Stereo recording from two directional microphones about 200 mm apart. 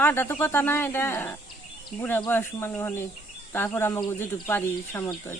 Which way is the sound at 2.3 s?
10° left (ahead or behind).